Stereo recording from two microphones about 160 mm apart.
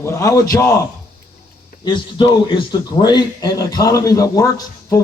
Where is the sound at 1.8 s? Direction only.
30° left (ahead or behind).